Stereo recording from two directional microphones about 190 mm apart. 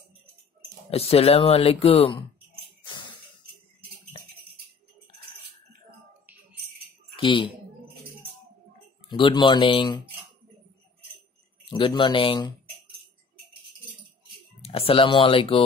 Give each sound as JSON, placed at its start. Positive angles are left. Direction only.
{"t": 0.8, "sound": "speech", "side_deg": 30}
{"t": 7.2, "sound": "speech", "side_deg": 25}
{"t": 9.1, "sound": "speech", "side_deg": 25}
{"t": 11.7, "sound": "speech", "side_deg": 25}
{"t": 14.6, "sound": "speech", "side_deg": 30}